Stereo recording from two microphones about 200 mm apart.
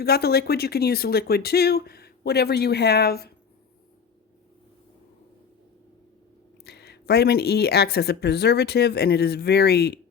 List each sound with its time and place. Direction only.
0.0 s speech: 50° left (ahead or behind)
6.7 s speech: 55° left (ahead or behind)